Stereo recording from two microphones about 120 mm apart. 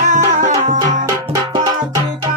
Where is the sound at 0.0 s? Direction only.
90° right.